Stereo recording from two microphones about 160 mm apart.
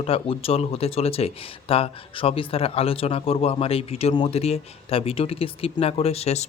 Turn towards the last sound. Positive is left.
turn(degrees=40)  # may be behind; listen again after turning